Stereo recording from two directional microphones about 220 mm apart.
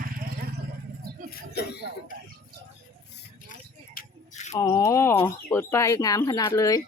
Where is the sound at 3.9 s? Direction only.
30° left (ahead or behind).